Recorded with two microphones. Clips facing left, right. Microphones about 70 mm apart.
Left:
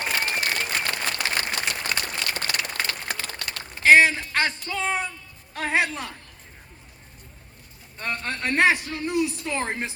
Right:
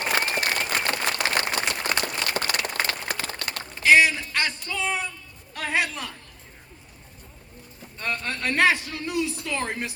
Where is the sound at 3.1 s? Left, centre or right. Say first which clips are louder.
Right 1 dB; centre.